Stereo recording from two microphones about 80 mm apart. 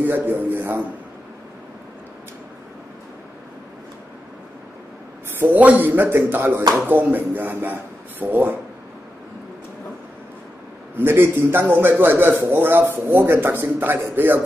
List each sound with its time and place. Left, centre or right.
0.0 s a man's voice: right
5.4 s a man's voice: right
11.0 s a man's voice: right